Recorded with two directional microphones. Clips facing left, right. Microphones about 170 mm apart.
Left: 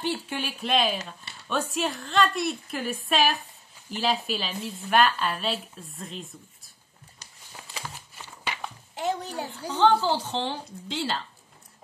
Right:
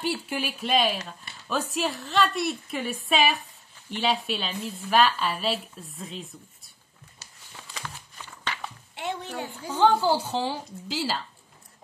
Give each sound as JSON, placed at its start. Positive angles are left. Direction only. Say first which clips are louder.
{"t": 0.0, "sound": "a woman's voice", "louder": "right 1 dB", "side_deg": -5}
{"t": 8.5, "sound": "a sound", "louder": "even", "side_deg": 10}
{"t": 8.9, "sound": "speech", "louder": "left 3 dB", "side_deg": 40}
{"t": 9.7, "sound": "a woman's voice", "louder": "right 1 dB", "side_deg": -10}